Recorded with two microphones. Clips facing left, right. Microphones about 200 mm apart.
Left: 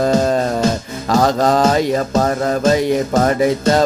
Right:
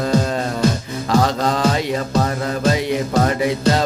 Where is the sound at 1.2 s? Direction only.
45° left (ahead or behind).